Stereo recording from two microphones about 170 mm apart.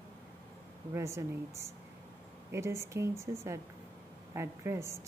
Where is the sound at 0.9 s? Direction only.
15° right (ahead or behind).